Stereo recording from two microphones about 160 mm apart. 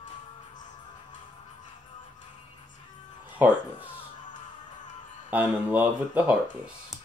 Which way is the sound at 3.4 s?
10° right (ahead or behind).